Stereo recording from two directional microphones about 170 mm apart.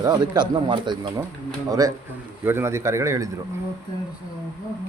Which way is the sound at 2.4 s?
15° right (ahead or behind).